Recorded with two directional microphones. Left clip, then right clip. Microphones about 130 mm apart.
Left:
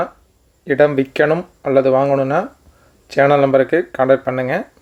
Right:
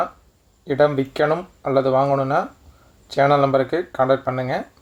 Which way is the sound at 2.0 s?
35° left (ahead or behind).